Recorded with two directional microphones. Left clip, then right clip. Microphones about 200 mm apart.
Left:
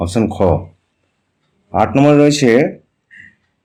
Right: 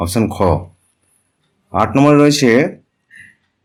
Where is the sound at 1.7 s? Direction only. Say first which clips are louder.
Even; 5° right (ahead or behind).